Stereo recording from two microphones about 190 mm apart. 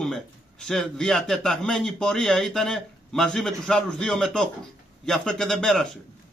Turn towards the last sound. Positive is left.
turn(degrees=5)  # may be behind; listen again after turning